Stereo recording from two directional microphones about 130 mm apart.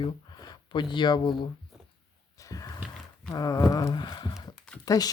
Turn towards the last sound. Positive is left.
turn(degrees=30)  # may be behind; listen again after turning